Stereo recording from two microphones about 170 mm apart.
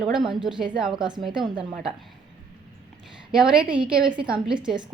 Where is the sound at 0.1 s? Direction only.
5° right (ahead or behind).